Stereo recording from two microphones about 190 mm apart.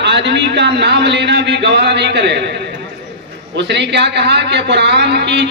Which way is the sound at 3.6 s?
65° right (ahead or behind).